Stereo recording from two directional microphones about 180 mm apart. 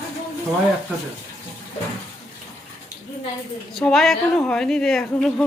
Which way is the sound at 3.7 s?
Centre (ahead or behind).